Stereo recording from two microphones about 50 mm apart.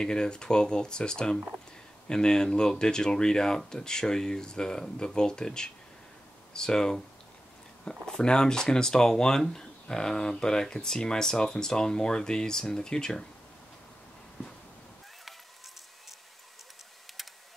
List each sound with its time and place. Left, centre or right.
0.0 s speech: centre
8.2 s speech: centre